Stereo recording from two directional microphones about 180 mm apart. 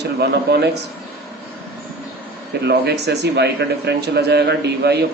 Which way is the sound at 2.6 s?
65° right (ahead or behind).